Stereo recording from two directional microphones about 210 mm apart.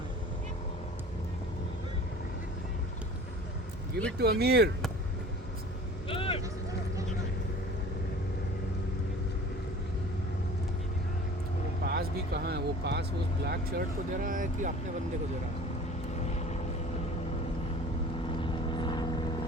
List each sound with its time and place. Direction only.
4.2 s speech: 50° right (ahead or behind)
6.1 s vehicle: 25° left (ahead or behind)
11.9 s speech: 50° right (ahead or behind)
16.1 s vehicle: 30° left (ahead or behind)
18.3 s vehicle: 25° left (ahead or behind)